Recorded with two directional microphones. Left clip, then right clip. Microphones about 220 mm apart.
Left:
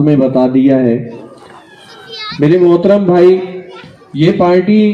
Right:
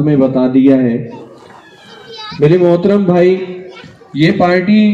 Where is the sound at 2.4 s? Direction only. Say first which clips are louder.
Left 1 dB; 35° left (ahead or behind).